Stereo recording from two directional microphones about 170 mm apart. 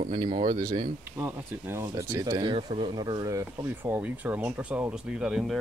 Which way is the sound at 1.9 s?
25° right (ahead or behind).